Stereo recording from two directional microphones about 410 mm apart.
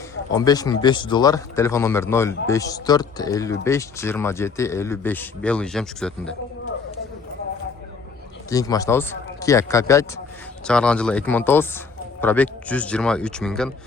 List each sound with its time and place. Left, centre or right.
0.3 s speech: centre
8.4 s speech: centre